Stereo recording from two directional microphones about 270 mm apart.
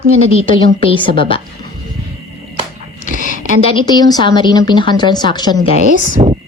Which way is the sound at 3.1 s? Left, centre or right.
Right.